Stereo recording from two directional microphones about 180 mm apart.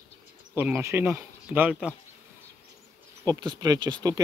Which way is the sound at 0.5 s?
10° right (ahead or behind).